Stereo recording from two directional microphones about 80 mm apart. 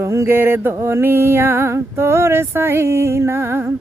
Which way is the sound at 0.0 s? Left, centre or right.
Right.